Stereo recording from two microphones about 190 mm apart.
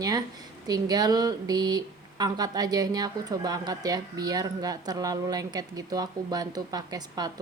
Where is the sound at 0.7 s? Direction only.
20° right (ahead or behind).